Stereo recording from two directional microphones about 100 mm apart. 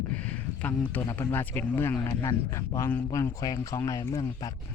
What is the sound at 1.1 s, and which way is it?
Speech, 25° left (ahead or behind).